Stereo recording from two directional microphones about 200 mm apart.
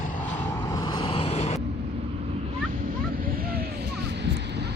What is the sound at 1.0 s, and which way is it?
Vehicle, 25° left (ahead or behind).